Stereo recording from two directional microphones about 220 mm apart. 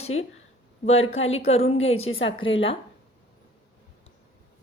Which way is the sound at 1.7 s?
65° left (ahead or behind).